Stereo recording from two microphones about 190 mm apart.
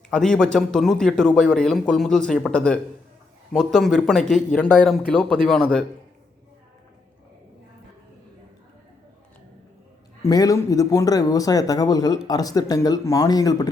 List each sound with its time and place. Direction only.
0.1 s speech: 5° left (ahead or behind)
10.2 s speech: 20° left (ahead or behind)